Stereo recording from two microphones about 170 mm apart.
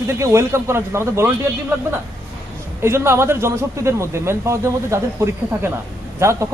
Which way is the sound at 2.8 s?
15° right (ahead or behind).